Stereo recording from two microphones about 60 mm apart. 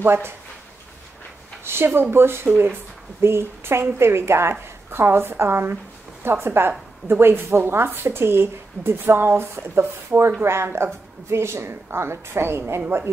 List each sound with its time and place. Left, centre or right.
0.0 s speech: right
1.6 s a woman's voice: right